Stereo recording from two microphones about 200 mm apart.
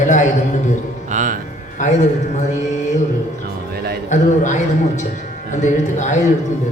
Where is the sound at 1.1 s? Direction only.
40° right (ahead or behind).